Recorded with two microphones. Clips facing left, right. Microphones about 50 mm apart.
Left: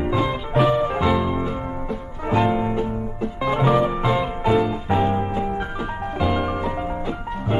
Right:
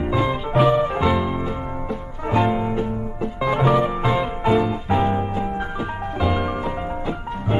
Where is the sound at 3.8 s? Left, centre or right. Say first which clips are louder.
Even; centre.